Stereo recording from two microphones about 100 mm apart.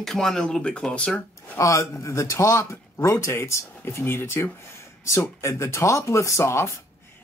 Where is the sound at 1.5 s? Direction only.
30° left (ahead or behind).